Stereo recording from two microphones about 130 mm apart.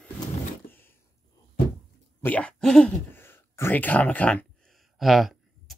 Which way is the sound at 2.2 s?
10° left (ahead or behind).